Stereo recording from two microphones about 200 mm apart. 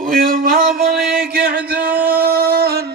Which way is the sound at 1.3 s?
50° right (ahead or behind).